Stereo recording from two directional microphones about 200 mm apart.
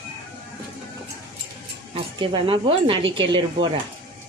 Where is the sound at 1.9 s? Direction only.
25° right (ahead or behind).